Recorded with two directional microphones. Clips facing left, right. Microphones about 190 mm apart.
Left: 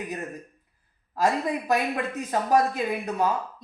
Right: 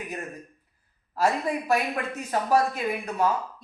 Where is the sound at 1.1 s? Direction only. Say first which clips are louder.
Even; 20° left (ahead or behind).